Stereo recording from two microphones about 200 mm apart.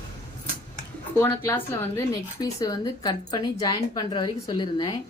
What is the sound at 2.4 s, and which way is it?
A woman's voice, 15° left (ahead or behind).